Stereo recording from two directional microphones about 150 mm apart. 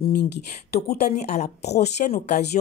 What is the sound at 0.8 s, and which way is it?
Speech, 90° left.